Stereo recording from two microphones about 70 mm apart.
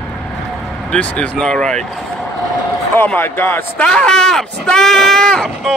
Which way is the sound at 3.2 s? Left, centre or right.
Left.